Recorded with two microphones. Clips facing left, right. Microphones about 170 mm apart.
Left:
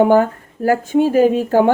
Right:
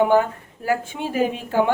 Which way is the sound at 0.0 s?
45° left (ahead or behind).